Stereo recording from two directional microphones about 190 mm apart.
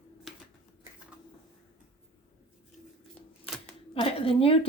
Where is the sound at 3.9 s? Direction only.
30° left (ahead or behind).